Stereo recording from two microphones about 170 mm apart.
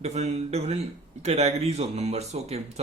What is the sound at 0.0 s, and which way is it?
Speech, 40° right (ahead or behind).